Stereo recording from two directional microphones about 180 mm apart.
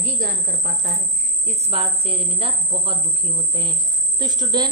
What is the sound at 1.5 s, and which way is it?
A woman's voice, 35° right (ahead or behind).